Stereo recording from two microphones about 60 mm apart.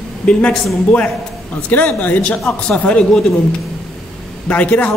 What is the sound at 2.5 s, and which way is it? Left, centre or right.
Speech, centre.